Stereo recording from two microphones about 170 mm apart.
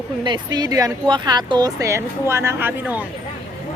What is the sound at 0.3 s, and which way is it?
Speech, 25° right (ahead or behind).